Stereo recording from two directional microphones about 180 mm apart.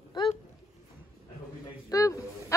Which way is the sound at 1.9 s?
20° left (ahead or behind).